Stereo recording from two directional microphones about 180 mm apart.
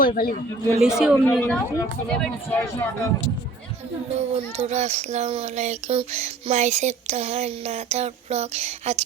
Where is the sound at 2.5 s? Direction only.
10° left (ahead or behind).